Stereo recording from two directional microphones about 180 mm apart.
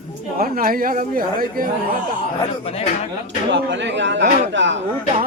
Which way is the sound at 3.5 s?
80° right.